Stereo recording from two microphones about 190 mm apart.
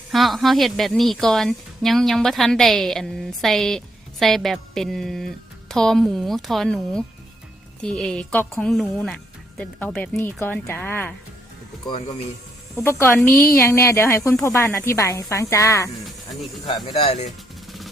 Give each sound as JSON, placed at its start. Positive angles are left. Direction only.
{"t": 0.1, "sound": "a woman's voice", "side_deg": 0}
{"t": 11.9, "sound": "speech", "side_deg": 30}
{"t": 12.7, "sound": "speech", "side_deg": 15}
{"t": 17.0, "sound": "speech", "side_deg": 35}